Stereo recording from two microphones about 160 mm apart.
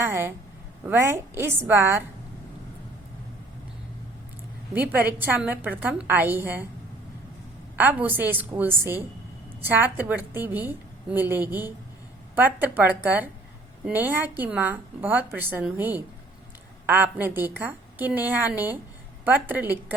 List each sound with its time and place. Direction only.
0.0 s a woman's voice: 15° right (ahead or behind)
4.7 s a woman's voice: 10° right (ahead or behind)
7.8 s a woman's voice: 10° right (ahead or behind)